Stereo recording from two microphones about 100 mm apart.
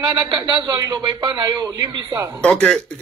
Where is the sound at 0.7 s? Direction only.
35° right (ahead or behind).